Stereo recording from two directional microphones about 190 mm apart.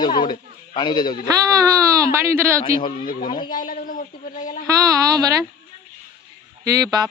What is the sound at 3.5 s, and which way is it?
A woman's voice, 45° left (ahead or behind).